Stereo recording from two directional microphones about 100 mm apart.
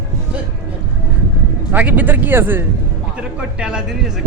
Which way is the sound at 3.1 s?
10° right (ahead or behind).